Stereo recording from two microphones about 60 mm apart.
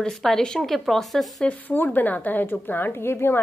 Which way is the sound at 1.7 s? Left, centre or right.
Left.